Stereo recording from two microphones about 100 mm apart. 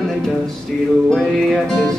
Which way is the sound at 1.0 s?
5° left (ahead or behind).